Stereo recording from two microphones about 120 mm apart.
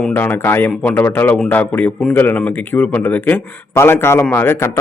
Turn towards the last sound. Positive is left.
turn(degrees=20)  # may be behind; listen again after turning